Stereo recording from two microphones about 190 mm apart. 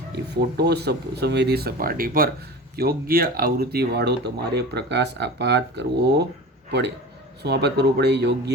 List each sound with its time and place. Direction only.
0.5 s speech: 60° right (ahead or behind)
7.4 s speech: 60° right (ahead or behind)